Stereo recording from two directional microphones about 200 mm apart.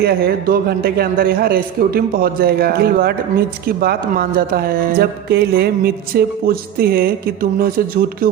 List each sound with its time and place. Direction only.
0.0 s a man's voice: 50° right (ahead or behind)